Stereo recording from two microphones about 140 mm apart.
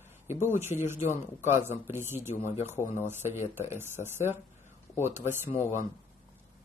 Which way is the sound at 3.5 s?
15° right (ahead or behind).